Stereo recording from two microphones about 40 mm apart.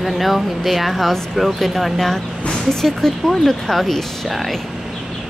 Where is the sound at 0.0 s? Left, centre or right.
Centre.